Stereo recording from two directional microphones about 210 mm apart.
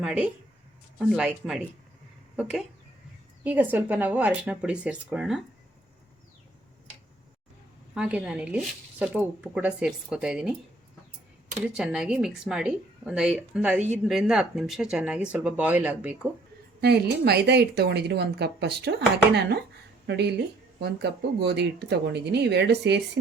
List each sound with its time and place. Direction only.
0.0 s speech: centre (ahead or behind)
7.9 s speech: 5° right (ahead or behind)
11.6 s speech: 5° right (ahead or behind)
16.8 s a woman's voice: 50° right (ahead or behind)